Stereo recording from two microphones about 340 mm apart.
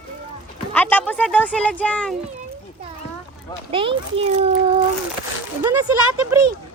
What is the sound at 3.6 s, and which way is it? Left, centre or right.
Speech, centre.